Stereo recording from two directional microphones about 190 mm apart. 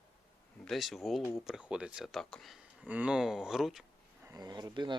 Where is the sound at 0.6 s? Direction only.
Centre (ahead or behind).